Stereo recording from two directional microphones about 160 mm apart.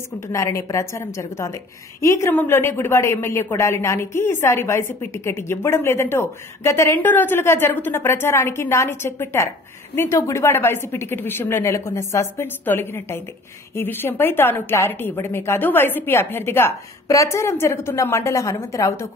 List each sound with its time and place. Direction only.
0.3 s a woman's voice: 20° left (ahead or behind)